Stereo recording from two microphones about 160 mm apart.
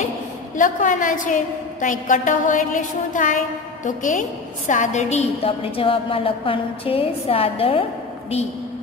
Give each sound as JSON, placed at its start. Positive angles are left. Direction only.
{"t": 0.6, "sound": "a woman's voice", "side_deg": 55}